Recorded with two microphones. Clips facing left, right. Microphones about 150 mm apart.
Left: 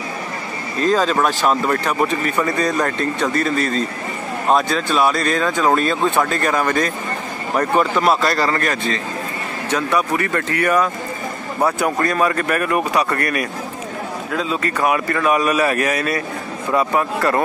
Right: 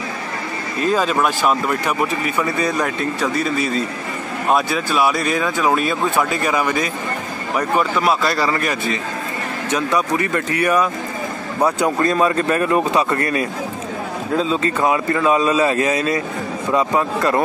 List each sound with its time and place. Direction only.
0.8 s speech: 10° right (ahead or behind)